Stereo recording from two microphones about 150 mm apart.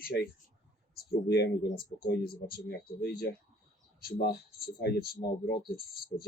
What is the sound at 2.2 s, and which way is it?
Speech, 90° left.